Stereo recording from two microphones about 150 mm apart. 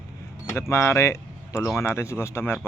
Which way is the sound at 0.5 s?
15° left (ahead or behind).